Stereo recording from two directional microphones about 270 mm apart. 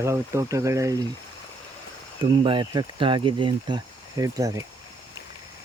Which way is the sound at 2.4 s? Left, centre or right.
Centre.